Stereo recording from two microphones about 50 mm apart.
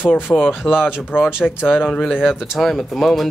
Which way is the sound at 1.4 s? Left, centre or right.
Centre.